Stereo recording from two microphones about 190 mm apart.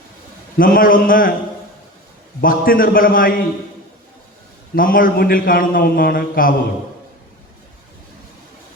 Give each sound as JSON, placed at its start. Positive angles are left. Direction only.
{"t": 0.6, "sound": "a man's voice", "side_deg": 50}
{"t": 2.4, "sound": "a man's voice", "side_deg": 50}
{"t": 4.7, "sound": "a man's voice", "side_deg": 50}